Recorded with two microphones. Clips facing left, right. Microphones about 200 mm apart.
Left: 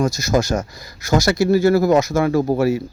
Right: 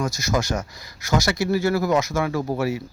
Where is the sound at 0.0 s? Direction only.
35° left (ahead or behind).